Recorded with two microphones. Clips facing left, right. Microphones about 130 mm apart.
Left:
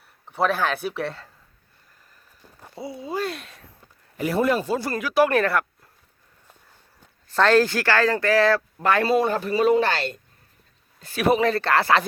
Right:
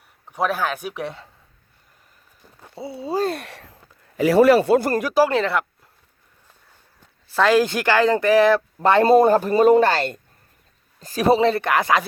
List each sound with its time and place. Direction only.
0.3 s speech: 10° right (ahead or behind)
2.7 s speech: 30° right (ahead or behind)
3.4 s a sound: 80° right
4.2 s a man's voice: 85° right; by 4.9 s 55° right (ahead or behind)
5.2 s speech: 20° right (ahead or behind)
7.3 s speech: 10° right (ahead or behind)
8.8 s speech: 30° right (ahead or behind)
9.0 s speech: 45° right (ahead or behind)
11.4 s speech: 20° right (ahead or behind)